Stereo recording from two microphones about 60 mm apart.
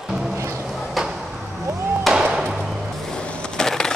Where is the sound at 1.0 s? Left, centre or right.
Centre.